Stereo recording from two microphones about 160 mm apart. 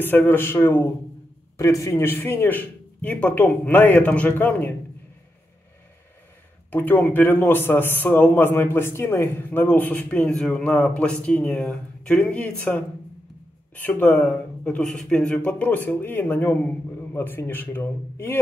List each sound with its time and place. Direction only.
0.0 s a man's voice: 10° left (ahead or behind)
6.7 s a man's voice: 10° left (ahead or behind)